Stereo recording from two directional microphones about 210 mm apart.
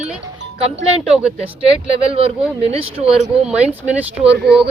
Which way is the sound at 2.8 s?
30° right (ahead or behind).